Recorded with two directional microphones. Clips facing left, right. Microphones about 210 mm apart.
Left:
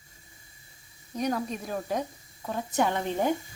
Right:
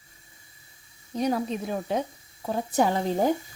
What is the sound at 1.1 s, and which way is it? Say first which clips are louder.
A woman's voice: right 3 dB; 30° right (ahead or behind).